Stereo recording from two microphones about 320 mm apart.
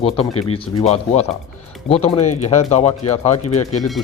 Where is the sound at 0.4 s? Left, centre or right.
Centre.